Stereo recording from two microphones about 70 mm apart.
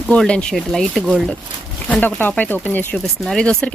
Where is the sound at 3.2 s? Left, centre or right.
Centre.